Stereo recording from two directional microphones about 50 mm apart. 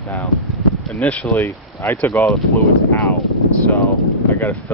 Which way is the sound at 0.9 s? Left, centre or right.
Left.